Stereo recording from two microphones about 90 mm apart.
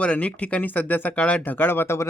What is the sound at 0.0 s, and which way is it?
Speech, 15° left (ahead or behind).